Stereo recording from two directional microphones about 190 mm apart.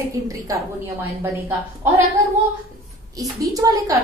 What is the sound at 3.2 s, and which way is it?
Speech, 15° right (ahead or behind).